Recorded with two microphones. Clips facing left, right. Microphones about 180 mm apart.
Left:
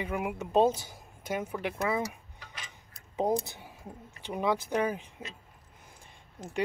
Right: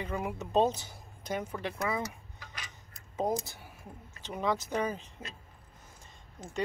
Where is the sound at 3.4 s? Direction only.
15° left (ahead or behind).